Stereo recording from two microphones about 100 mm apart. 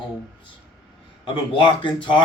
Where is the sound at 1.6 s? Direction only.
55° left (ahead or behind).